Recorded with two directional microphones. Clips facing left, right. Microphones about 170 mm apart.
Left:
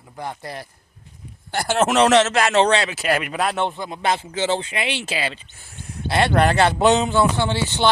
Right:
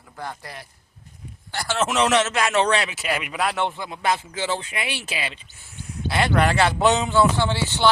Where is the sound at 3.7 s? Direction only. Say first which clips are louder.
Left 1 dB; 20° left (ahead or behind).